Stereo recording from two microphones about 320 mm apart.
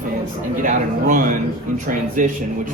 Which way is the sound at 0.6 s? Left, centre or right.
Right.